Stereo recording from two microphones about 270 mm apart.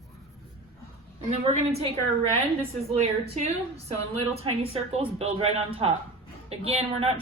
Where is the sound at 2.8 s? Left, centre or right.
Right.